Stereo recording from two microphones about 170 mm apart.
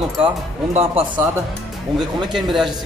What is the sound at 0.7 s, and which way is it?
Speech, 40° right (ahead or behind).